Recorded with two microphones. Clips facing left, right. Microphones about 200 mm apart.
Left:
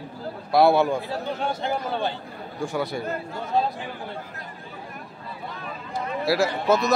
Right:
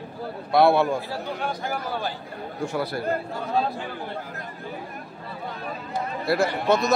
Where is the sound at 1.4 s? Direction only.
25° left (ahead or behind).